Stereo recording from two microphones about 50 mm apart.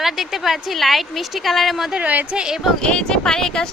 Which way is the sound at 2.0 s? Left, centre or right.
Right.